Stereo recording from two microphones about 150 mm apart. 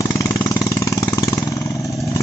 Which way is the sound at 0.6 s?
20° left (ahead or behind).